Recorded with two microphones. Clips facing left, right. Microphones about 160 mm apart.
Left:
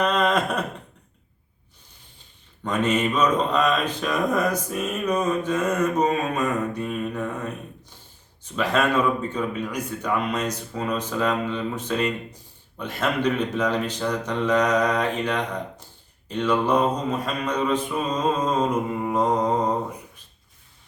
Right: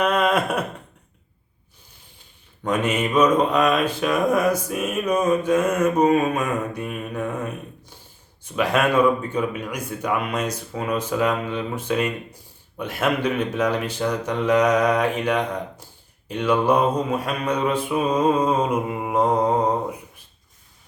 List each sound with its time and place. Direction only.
0.0 s a sound: 10° right (ahead or behind)
2.6 s speech: 10° right (ahead or behind)
8.5 s speech: 10° right (ahead or behind)